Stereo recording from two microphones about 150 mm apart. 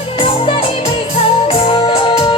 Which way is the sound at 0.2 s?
35° left (ahead or behind).